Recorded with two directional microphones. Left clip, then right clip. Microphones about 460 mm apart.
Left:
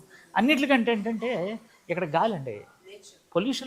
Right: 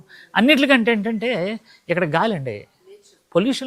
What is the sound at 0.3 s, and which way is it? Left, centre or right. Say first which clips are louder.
Speech: right 7 dB; right.